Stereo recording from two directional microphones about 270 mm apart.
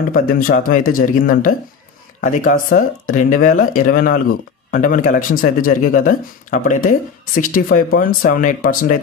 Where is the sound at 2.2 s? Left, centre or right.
Left.